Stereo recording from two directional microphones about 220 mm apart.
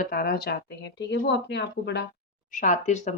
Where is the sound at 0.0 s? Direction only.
40° left (ahead or behind).